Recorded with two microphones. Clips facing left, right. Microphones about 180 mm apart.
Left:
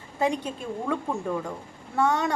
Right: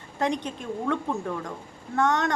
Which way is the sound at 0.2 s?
10° left (ahead or behind).